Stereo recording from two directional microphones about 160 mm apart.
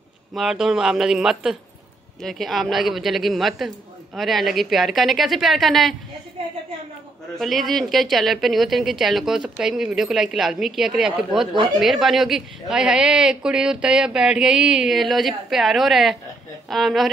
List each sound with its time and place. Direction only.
0.3 s a woman's voice: centre (ahead or behind)
7.3 s a woman's voice: centre (ahead or behind)